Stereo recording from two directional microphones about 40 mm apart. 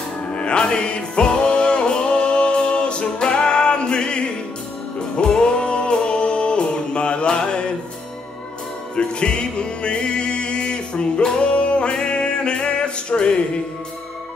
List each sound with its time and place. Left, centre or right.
0.3 s music: left
5.4 s music: left
8.9 s music: left